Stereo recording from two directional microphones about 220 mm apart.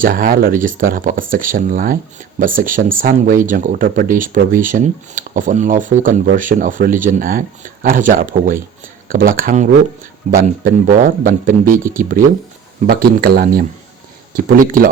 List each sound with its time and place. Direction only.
0.0 s speech: 40° right (ahead or behind)